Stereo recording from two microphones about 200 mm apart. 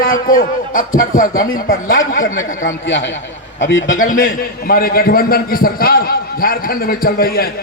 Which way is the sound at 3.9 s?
40° left (ahead or behind).